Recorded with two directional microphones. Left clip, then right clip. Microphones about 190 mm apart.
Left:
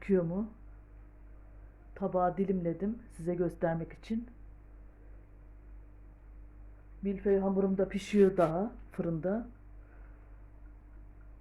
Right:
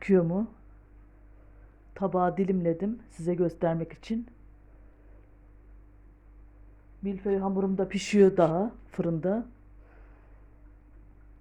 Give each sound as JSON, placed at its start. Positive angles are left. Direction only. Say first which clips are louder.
{"t": 0.0, "sound": "speech", "louder": "right 6 dB", "side_deg": -50}
{"t": 1.9, "sound": "speech", "louder": "right 4 dB", "side_deg": -55}
{"t": 7.0, "sound": "speech", "louder": "even", "side_deg": -30}
{"t": 7.8, "sound": "speech", "louder": "right 6 dB", "side_deg": -50}